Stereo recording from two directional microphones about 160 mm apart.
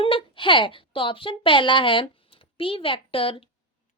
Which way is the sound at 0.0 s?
35° left (ahead or behind).